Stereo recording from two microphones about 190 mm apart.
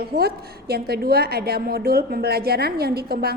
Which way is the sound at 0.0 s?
55° right (ahead or behind).